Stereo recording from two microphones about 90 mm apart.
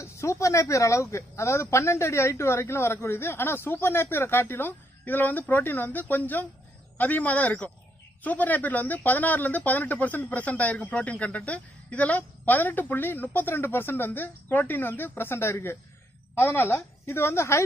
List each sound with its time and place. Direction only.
0.0 s a man's voice: 30° left (ahead or behind)